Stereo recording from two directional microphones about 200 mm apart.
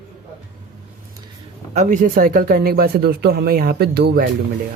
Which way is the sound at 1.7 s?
40° right (ahead or behind).